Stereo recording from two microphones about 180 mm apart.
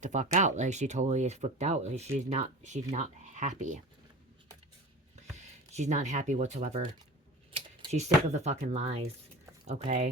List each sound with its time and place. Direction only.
0.0 s speech: 45° right (ahead or behind)
5.7 s speech: 40° right (ahead or behind)